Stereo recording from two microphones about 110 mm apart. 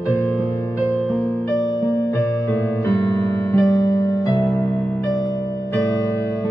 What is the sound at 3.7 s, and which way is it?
Music, 30° left (ahead or behind).